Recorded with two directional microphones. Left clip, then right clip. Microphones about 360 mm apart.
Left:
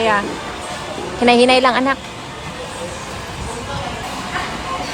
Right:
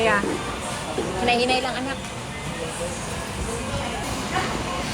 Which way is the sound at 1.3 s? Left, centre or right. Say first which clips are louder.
Left 11 dB; centre.